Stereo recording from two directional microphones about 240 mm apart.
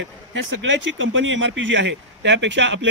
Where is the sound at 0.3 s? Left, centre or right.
Right.